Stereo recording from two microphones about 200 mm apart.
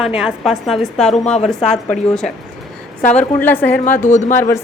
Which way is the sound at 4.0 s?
35° left (ahead or behind).